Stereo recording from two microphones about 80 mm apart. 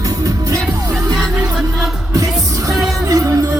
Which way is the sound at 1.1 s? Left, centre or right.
Centre.